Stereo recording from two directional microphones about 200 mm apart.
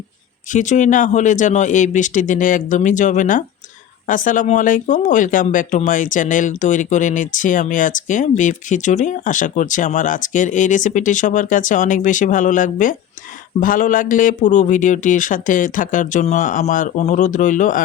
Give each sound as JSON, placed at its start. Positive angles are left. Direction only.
{"t": 0.5, "sound": "speech", "side_deg": 40}